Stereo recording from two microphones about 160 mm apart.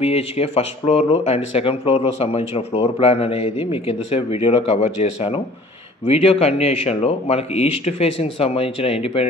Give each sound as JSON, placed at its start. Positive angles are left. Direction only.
{"t": 0.0, "sound": "speech", "side_deg": 40}